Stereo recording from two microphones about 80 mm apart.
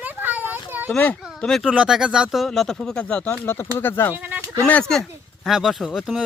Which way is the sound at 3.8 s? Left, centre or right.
Left.